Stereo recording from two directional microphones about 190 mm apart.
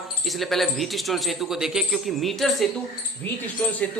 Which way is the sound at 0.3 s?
Centre (ahead or behind).